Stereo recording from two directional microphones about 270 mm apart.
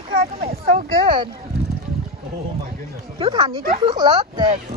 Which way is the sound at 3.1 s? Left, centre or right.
Centre.